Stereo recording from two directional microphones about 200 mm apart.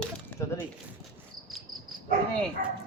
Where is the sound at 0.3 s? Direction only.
10° left (ahead or behind).